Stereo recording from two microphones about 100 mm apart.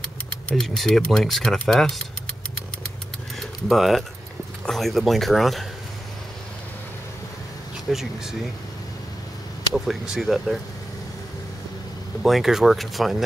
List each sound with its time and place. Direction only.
0.5 s speech: 5° left (ahead or behind)
3.3 s keys jangling: centre (ahead or behind)
4.6 s speech: 5° left (ahead or behind)
7.9 s speech: 5° right (ahead or behind)
10.1 s speech: centre (ahead or behind)
12.2 s speech: centre (ahead or behind)